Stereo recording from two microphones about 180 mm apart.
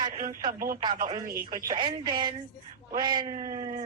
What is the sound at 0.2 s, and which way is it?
Speech, 45° right (ahead or behind).